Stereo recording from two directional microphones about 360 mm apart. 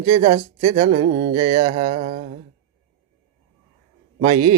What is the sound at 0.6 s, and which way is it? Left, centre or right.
Speech, centre.